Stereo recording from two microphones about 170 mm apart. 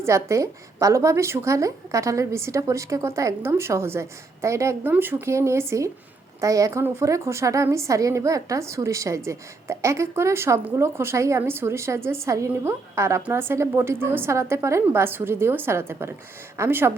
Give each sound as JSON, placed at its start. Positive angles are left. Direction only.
{"t": 0.0, "sound": "a woman's voice", "side_deg": -15}